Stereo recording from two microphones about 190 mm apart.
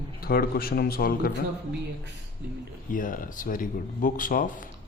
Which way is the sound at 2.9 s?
45° left (ahead or behind).